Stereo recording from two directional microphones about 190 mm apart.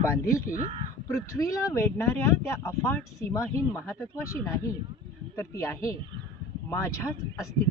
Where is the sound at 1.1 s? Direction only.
15° left (ahead or behind).